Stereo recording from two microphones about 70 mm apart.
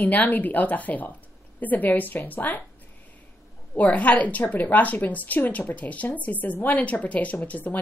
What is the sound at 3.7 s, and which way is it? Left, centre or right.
Speech, left.